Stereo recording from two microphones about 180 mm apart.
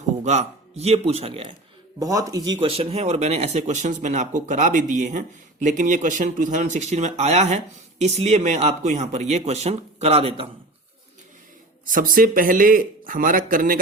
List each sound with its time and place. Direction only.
0.2 s speech: 40° right (ahead or behind)
2.0 s speech: 20° right (ahead or behind)
11.9 s speech: 50° right (ahead or behind)